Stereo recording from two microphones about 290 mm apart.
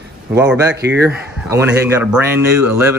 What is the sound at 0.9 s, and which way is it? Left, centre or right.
Speech, centre.